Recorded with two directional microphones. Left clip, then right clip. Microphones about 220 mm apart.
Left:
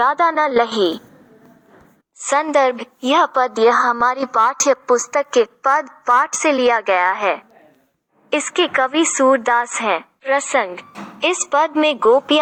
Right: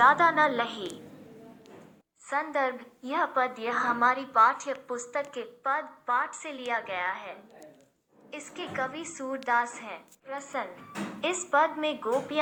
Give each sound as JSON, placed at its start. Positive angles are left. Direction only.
{"t": 0.0, "sound": "a woman's voice", "side_deg": 45}
{"t": 2.2, "sound": "a woman's voice", "side_deg": 45}